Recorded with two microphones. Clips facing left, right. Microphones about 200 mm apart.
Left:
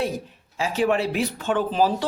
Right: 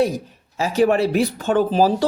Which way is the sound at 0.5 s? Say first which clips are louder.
Right 5 dB; 40° right (ahead or behind).